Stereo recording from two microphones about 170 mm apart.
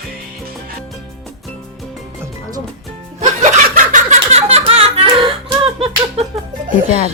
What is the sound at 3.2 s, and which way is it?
Snicker, 45° right (ahead or behind).